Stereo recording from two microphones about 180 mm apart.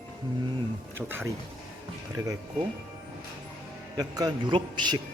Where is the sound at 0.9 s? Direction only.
10° right (ahead or behind).